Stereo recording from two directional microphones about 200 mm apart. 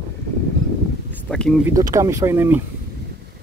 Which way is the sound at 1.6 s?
15° right (ahead or behind).